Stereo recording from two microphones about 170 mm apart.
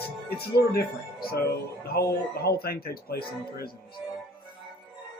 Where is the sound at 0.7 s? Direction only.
65° left (ahead or behind).